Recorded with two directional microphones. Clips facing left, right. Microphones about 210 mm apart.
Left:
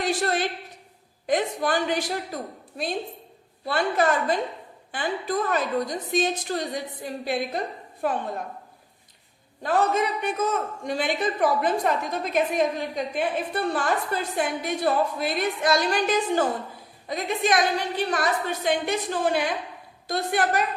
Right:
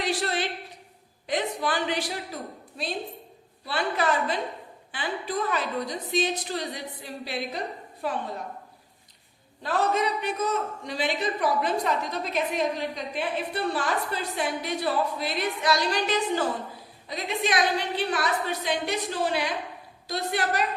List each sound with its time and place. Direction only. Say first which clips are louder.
0.0 s a sound: left 3 dB; 45° left (ahead or behind)
1.3 s a woman's voice: left 4 dB; 45° left (ahead or behind)
3.7 s a woman's voice: left 3 dB; 45° left (ahead or behind)
9.6 s a woman's voice: left 2 dB; 50° left (ahead or behind)